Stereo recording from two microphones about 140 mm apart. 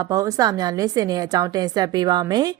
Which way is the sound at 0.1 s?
25° right (ahead or behind).